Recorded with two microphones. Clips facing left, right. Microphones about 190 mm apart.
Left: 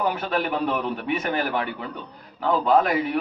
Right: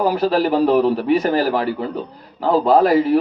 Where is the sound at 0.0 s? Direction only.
35° right (ahead or behind).